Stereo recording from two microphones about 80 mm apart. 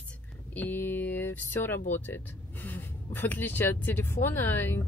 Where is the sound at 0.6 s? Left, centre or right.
Left.